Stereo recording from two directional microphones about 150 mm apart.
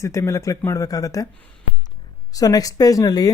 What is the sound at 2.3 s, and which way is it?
Speech, 25° left (ahead or behind).